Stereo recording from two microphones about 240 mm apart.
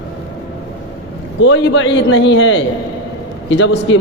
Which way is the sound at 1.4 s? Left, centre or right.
Left.